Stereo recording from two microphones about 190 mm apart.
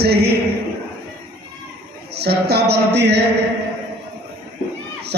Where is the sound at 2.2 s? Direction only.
60° right (ahead or behind).